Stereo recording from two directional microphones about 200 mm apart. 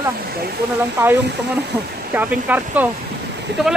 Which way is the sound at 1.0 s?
10° right (ahead or behind).